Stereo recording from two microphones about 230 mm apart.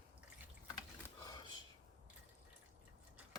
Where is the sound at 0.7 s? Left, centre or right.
Centre.